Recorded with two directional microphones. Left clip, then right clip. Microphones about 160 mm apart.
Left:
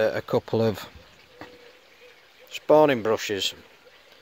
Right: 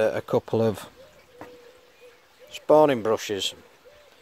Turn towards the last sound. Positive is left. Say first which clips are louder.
# even
turn(degrees=0)  # may be behind; listen again after turning